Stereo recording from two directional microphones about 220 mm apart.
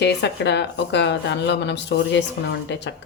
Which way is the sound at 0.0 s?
50° left (ahead or behind).